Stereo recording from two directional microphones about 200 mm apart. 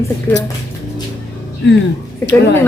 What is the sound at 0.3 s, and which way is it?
Speech, 10° left (ahead or behind).